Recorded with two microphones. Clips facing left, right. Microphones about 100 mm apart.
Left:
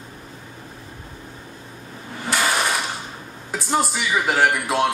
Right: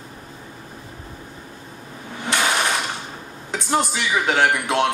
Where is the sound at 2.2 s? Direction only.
Centre (ahead or behind).